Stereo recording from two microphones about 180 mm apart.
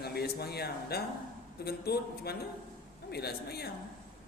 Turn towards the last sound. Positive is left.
turn(degrees=60)  # may be behind; listen again after turning